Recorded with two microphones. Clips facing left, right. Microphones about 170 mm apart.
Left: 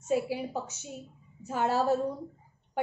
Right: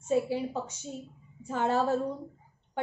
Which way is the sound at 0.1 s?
10° left (ahead or behind).